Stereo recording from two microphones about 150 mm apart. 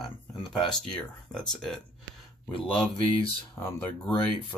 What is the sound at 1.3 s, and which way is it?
Speech, 5° left (ahead or behind).